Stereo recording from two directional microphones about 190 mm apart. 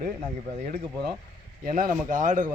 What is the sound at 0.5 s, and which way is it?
Speech, 35° right (ahead or behind).